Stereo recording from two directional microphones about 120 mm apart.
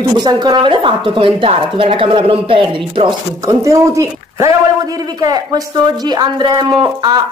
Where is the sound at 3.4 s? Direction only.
25° right (ahead or behind).